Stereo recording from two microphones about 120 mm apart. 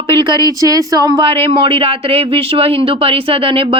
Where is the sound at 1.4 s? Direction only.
50° right (ahead or behind).